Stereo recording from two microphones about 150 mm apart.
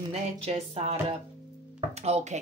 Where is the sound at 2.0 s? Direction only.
50° right (ahead or behind).